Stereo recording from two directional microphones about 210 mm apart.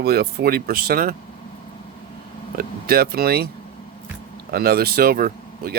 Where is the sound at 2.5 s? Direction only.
45° right (ahead or behind).